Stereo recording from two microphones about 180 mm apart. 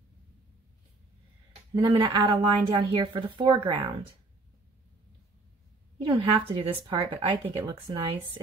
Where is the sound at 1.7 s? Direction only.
25° right (ahead or behind).